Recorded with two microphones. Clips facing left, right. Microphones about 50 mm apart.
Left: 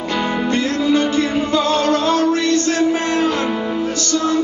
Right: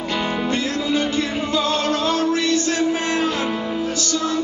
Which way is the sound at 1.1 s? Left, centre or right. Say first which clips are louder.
Left 4 dB; left.